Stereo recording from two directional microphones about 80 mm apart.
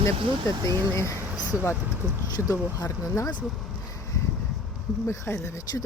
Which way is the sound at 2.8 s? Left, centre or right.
Left.